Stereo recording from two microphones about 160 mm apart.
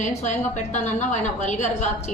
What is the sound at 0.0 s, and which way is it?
A woman's voice, 50° left (ahead or behind).